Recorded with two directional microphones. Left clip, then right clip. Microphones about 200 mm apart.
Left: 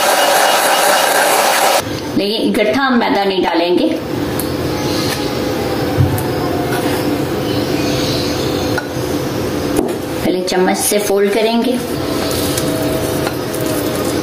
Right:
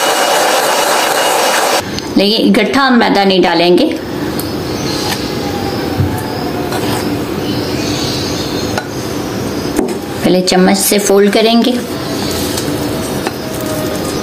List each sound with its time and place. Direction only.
2.1 s a woman's voice: 35° right (ahead or behind)
10.5 s a woman's voice: 30° right (ahead or behind)